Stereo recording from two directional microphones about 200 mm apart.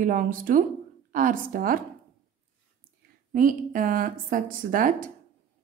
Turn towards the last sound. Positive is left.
turn(degrees=-45)  # may be behind; listen again after turning